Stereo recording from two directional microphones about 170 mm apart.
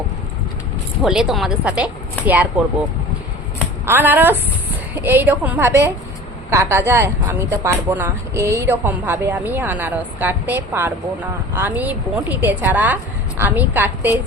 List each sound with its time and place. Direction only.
1.0 s a woman's voice: centre (ahead or behind)
3.8 s a woman's voice: 15° right (ahead or behind)